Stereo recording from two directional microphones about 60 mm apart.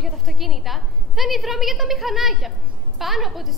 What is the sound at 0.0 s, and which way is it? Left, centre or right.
A woman's voice, centre.